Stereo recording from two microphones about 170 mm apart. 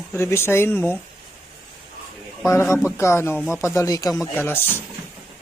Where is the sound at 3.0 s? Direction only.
15° left (ahead or behind).